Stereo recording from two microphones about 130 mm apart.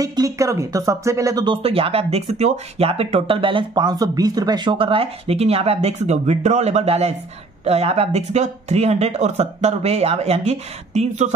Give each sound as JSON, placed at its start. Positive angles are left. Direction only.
{"t": 0.0, "sound": "speech", "side_deg": -25}
{"t": 1.6, "sound": "speech", "side_deg": -50}